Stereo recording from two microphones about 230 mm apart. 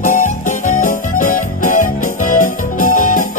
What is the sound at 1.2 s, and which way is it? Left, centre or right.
Music, left.